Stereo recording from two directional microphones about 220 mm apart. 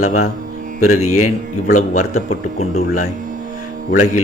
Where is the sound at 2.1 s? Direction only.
30° left (ahead or behind).